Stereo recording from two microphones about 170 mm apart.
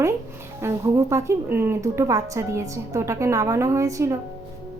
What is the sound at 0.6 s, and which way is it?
A woman's voice, 15° right (ahead or behind).